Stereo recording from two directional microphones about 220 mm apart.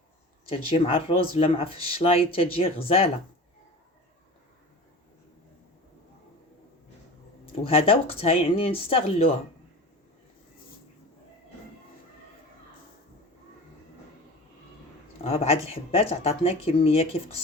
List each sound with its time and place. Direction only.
0.4 s speech: 25° left (ahead or behind)
7.5 s speech: 25° left (ahead or behind)
15.2 s speech: 25° left (ahead or behind)